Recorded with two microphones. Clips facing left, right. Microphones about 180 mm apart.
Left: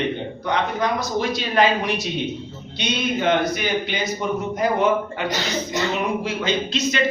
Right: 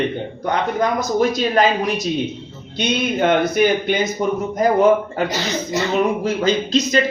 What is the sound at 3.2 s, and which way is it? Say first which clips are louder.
Speech: right 6 dB; 50° right (ahead or behind).